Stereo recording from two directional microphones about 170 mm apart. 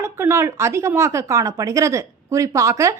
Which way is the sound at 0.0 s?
15° right (ahead or behind).